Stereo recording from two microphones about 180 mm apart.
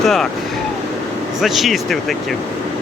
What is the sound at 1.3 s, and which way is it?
Speech, centre (ahead or behind).